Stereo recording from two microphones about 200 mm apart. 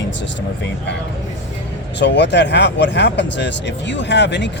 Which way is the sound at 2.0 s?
60° left (ahead or behind).